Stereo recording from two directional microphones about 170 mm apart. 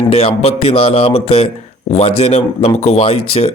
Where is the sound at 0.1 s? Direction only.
35° left (ahead or behind).